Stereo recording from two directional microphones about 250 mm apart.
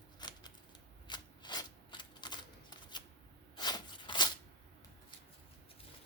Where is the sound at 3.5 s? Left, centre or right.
Centre.